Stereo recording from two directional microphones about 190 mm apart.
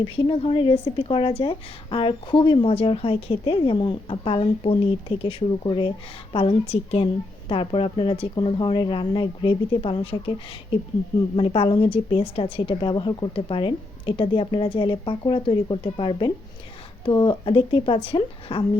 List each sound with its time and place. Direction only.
0.0 s a woman's voice: 25° left (ahead or behind)